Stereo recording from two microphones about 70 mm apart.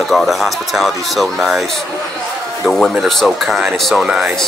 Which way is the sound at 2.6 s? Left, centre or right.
Centre.